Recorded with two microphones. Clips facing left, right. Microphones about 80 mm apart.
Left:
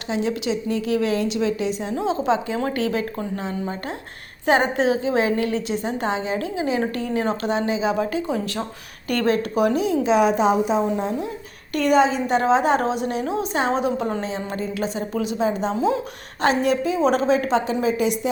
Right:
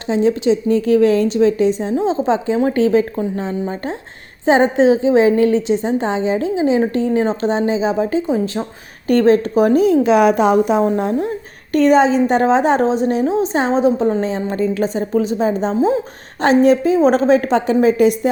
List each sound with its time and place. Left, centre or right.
0.1 s a woman's voice: right
11.9 s a woman's voice: right